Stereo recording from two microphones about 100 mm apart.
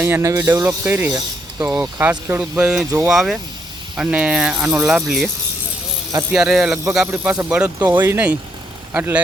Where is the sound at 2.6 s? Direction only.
10° right (ahead or behind).